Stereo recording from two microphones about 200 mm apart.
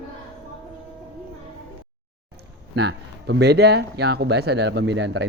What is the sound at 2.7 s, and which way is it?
Speech, 60° right (ahead or behind).